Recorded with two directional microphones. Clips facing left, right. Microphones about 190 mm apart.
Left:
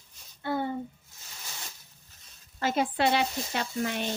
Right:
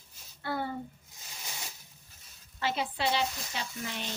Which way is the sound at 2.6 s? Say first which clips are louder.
Left 5 dB; 45° left (ahead or behind).